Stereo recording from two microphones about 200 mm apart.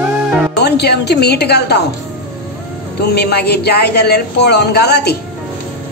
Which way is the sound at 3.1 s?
55° left (ahead or behind).